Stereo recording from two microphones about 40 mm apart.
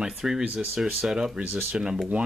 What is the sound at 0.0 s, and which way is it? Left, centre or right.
Speech, centre.